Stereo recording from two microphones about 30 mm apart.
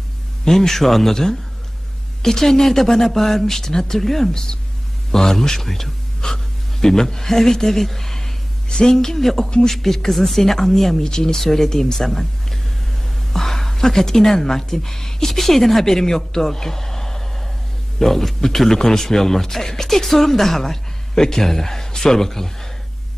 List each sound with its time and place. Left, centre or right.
0.5 s a man's voice: centre
4.3 s a man's voice: left
8.6 s a man's voice: left; by 11.1 s centre
11.1 s speech: left
11.3 s a man's voice: centre